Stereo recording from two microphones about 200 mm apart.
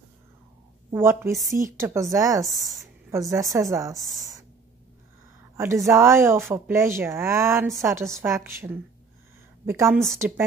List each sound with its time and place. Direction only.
0.9 s speech: 10° right (ahead or behind)
5.6 s speech: 15° right (ahead or behind)